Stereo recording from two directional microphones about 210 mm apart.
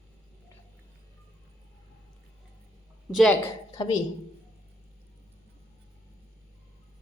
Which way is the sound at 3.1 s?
5° left (ahead or behind).